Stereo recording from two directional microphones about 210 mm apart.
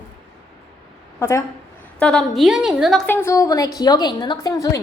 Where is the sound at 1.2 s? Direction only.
10° left (ahead or behind).